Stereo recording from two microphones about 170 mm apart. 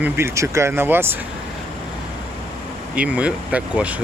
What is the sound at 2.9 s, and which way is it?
Speech, 5° right (ahead or behind).